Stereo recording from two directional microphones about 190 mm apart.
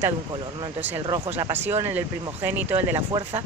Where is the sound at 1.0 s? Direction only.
20° right (ahead or behind).